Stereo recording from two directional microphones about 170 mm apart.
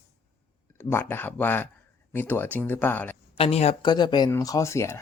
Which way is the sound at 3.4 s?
40° left (ahead or behind).